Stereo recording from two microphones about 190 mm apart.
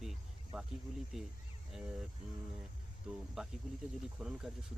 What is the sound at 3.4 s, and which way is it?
Speech, 5° right (ahead or behind).